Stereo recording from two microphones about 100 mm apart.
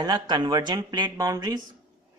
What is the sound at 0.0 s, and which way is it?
A woman's voice, 40° right (ahead or behind).